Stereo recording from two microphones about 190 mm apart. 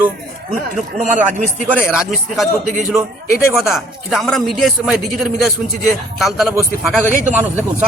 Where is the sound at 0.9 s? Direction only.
40° right (ahead or behind).